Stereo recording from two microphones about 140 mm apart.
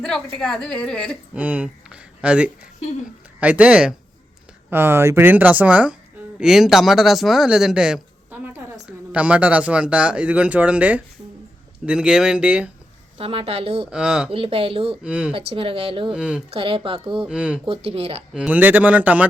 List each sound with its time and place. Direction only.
0.0 s a woman's voice: 5° left (ahead or behind)
1.3 s speech: 10° right (ahead or behind)
13.1 s speech: 40° right (ahead or behind)
13.9 s a woman's voice: 5° right (ahead or behind)
14.3 s speech: 40° right (ahead or behind)
15.0 s speech: 5° right (ahead or behind)
15.3 s speech: 40° right (ahead or behind)
16.1 s speech: 5° right (ahead or behind)
16.5 s speech: 40° right (ahead or behind)
17.2 s speech: 5° right (ahead or behind)
17.7 s speech: 45° right (ahead or behind)
18.3 s speech: 10° right (ahead or behind)